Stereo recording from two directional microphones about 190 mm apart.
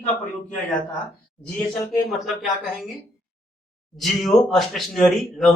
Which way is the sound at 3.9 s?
Centre (ahead or behind).